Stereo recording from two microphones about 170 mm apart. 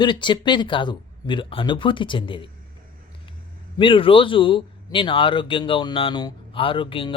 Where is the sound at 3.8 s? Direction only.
30° left (ahead or behind).